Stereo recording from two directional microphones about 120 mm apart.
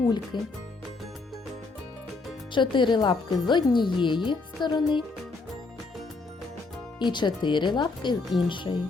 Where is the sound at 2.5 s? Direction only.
40° left (ahead or behind).